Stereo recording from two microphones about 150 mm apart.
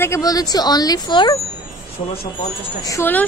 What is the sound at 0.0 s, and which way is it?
A woman's voice, 20° left (ahead or behind).